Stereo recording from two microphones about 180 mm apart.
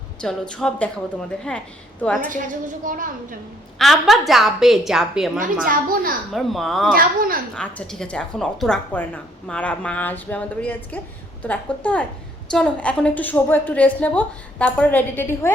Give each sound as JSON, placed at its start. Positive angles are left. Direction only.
{"t": 0.2, "sound": "a woman's voice", "side_deg": 5}
{"t": 2.8, "sound": "a child's voice", "side_deg": -50}
{"t": 3.8, "sound": "a woman's voice", "side_deg": 0}
{"t": 5.6, "sound": "a child's voice", "side_deg": -50}
{"t": 6.3, "sound": "a woman's voice", "side_deg": 0}
{"t": 6.9, "sound": "a child's voice", "side_deg": -50}
{"t": 7.5, "sound": "a woman's voice", "side_deg": 5}